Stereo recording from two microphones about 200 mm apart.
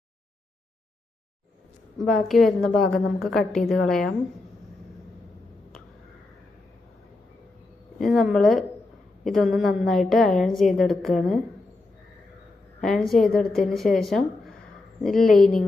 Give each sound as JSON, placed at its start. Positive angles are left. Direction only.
{"t": 2.0, "sound": "a woman's voice", "side_deg": 0}
{"t": 8.0, "sound": "a woman's voice", "side_deg": 0}
{"t": 12.8, "sound": "a woman's voice", "side_deg": 0}